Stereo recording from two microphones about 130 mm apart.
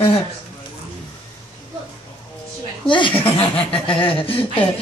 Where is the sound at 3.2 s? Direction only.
45° left (ahead or behind).